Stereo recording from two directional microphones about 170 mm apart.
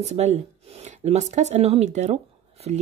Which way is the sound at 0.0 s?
40° right (ahead or behind).